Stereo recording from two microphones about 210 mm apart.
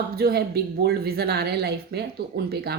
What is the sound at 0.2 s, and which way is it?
Speech, 50° right (ahead or behind).